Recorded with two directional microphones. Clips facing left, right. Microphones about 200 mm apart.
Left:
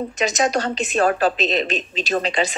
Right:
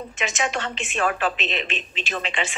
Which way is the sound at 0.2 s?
40° left (ahead or behind).